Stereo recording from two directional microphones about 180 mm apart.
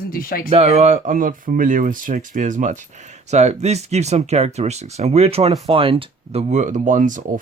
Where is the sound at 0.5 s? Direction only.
35° right (ahead or behind).